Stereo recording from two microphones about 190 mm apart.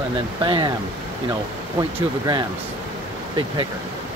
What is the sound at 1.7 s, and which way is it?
Speech, 20° right (ahead or behind).